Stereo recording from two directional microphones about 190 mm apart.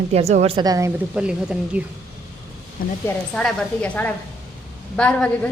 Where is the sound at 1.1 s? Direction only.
5° right (ahead or behind).